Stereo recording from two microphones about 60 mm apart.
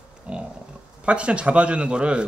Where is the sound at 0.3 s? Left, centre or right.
Centre.